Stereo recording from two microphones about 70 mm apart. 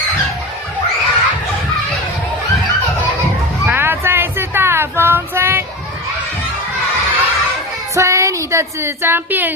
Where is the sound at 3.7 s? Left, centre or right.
Right.